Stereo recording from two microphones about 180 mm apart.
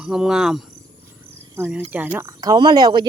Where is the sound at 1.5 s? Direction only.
10° right (ahead or behind).